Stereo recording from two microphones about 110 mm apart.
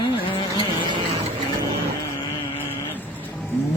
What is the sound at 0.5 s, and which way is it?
Vehicle, 40° right (ahead or behind).